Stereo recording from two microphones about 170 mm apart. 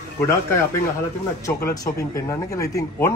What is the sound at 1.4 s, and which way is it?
Speech, 15° left (ahead or behind).